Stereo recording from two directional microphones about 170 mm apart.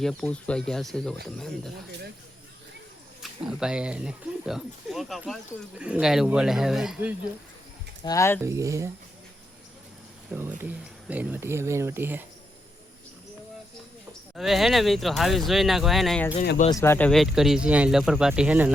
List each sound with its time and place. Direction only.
0.0 s speech: 5° left (ahead or behind)
3.2 s speech: 5° right (ahead or behind)
8.0 s speech: 15° left (ahead or behind)
8.4 s speech: 15° right (ahead or behind)
10.6 s speech: 10° right (ahead or behind)
14.1 s speech: centre (ahead or behind)
16.8 s speech: 15° left (ahead or behind)
17.1 s speech: centre (ahead or behind)